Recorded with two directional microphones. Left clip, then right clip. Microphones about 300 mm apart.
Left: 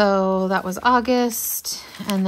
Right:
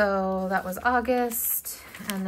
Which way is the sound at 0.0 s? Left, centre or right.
Centre.